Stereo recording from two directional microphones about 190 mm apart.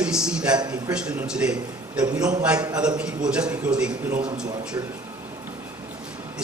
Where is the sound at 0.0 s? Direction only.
5° right (ahead or behind).